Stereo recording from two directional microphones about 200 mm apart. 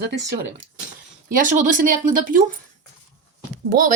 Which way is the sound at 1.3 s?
40° right (ahead or behind).